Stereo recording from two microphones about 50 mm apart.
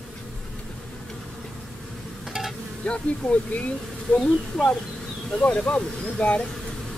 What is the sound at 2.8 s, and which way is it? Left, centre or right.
Speech, left.